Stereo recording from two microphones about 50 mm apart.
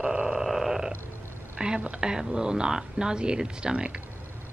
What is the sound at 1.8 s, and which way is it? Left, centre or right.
Speech, right.